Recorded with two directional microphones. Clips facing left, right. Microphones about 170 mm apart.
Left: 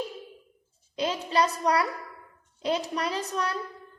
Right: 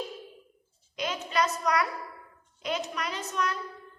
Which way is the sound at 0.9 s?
30° left (ahead or behind).